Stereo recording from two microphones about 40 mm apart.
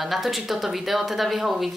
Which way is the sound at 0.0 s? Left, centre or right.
Centre.